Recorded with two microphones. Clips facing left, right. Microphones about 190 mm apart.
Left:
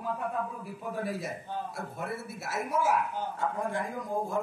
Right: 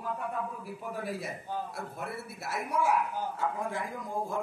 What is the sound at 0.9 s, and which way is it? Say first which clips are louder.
A man's voice: left 3 dB; centre (ahead or behind).